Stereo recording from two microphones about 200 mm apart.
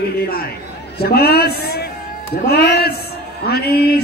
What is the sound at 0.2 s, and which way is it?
A man's voice, 50° left (ahead or behind).